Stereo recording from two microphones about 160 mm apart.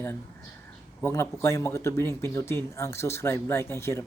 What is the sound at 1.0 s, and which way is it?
Speech, 15° left (ahead or behind).